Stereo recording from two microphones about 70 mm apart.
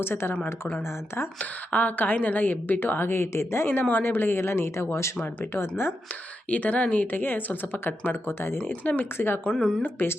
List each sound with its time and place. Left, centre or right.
0.0 s a woman's voice: left
1.4 s a woman's voice: left
6.5 s a woman's voice: left
9.4 s speech: centre
9.8 s a woman's voice: left